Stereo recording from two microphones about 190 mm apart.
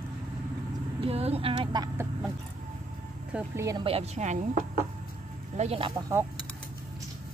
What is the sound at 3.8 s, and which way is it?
Speech, 35° right (ahead or behind).